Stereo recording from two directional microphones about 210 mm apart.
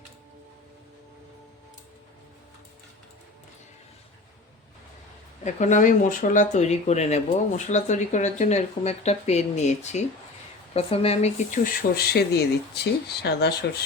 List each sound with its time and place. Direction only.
5.4 s speech: 35° left (ahead or behind); by 13.7 s 50° left (ahead or behind)